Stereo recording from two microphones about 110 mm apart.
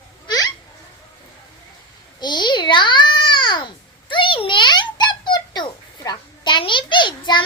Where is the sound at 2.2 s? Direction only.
40° left (ahead or behind).